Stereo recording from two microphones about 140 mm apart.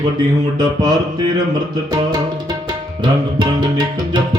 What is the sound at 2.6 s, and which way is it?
Tabla, 30° right (ahead or behind).